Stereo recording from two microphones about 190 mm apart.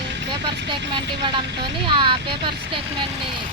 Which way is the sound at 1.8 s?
25° right (ahead or behind).